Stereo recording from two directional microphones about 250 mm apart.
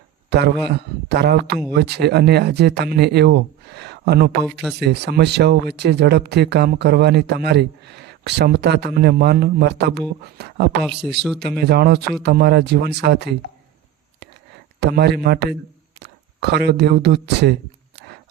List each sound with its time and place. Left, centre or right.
0.3 s a man's voice: right
14.8 s speech: right